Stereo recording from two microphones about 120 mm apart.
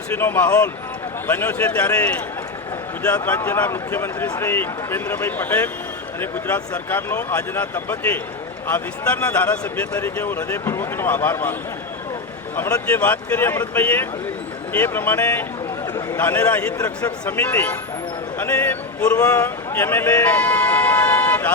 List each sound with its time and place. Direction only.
0.2 s speech: 15° left (ahead or behind)
3.2 s speech: 15° left (ahead or behind)
9.4 s speech: 15° left (ahead or behind)
12.5 s speech: 15° left (ahead or behind)
19.2 s a man's voice: 30° left (ahead or behind)
19.7 s vehicle: 20° left (ahead or behind)